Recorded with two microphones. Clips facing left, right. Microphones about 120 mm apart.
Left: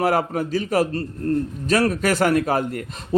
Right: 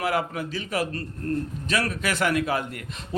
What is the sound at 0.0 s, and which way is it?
A man's voice, 40° left (ahead or behind).